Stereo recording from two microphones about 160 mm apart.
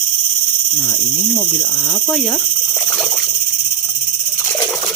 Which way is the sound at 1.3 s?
5° right (ahead or behind).